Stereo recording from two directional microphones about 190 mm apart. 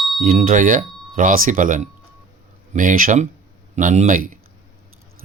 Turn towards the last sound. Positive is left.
turn(degrees=-45)  # may be behind; listen again after turning